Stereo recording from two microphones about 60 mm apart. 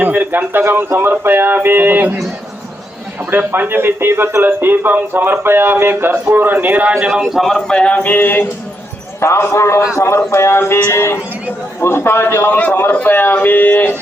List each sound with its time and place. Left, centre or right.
0.0 s speech: right
3.2 s speech: right
4.4 s speech: right
7.1 s a man's voice: centre
7.7 s a sound: centre
8.0 s a man's voice: left
9.2 s a man's voice: left